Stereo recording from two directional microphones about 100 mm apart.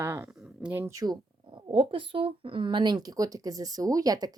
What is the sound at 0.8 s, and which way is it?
Speech, 35° right (ahead or behind).